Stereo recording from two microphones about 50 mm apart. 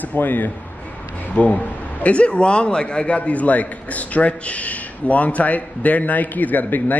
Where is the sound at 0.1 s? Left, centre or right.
Left.